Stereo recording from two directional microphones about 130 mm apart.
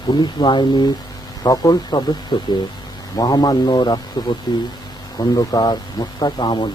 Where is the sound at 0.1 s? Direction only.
35° left (ahead or behind).